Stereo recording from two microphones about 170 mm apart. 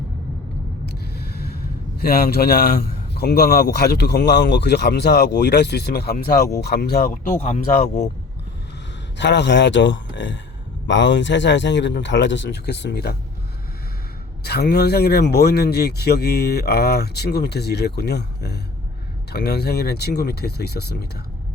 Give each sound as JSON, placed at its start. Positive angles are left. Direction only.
{"t": 0.9, "sound": "vehicle", "side_deg": 70}
{"t": 2.0, "sound": "a man's voice", "side_deg": 65}
{"t": 7.1, "sound": "speech", "side_deg": 50}
{"t": 9.1, "sound": "a man's voice", "side_deg": 90}
{"t": 14.4, "sound": "a man's voice", "side_deg": 75}